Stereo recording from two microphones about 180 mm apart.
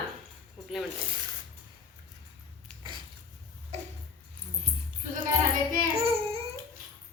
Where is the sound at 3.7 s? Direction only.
40° right (ahead or behind).